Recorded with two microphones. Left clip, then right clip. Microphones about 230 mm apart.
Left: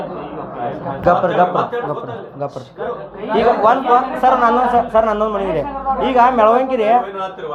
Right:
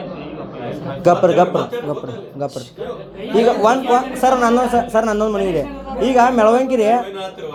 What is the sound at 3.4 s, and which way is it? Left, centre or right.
A man's voice, right.